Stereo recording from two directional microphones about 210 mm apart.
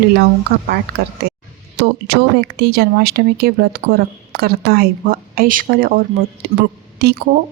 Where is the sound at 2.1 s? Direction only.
50° right (ahead or behind).